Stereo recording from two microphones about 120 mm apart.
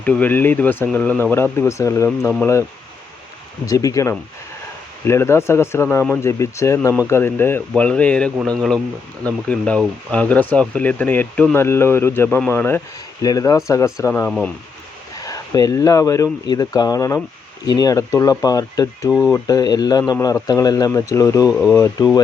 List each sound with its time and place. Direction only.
0.0 s speech: 15° left (ahead or behind)
3.7 s speech: 30° left (ahead or behind)
13.2 s speech: 30° left (ahead or behind)
14.1 s speech: 15° left (ahead or behind)
15.2 s speech: 30° left (ahead or behind)
21.5 s speech: 5° right (ahead or behind)
21.8 s speech: 30° left (ahead or behind)